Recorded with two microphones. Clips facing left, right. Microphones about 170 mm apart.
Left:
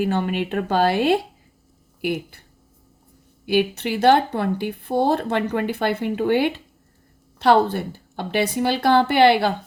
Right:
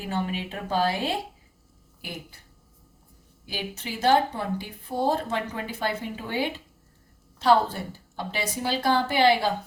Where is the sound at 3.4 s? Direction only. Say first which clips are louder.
Left 14 dB; 65° left (ahead or behind).